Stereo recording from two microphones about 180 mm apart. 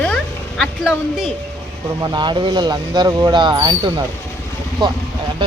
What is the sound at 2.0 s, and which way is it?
Speech, 25° right (ahead or behind).